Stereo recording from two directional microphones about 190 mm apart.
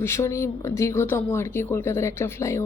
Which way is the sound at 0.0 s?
15° left (ahead or behind).